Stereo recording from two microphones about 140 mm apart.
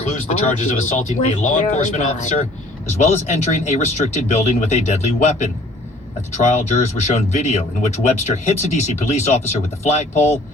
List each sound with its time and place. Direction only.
0.0 s speech: 60° left (ahead or behind)